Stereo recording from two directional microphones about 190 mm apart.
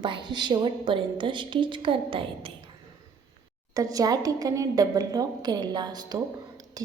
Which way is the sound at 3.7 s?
20° right (ahead or behind).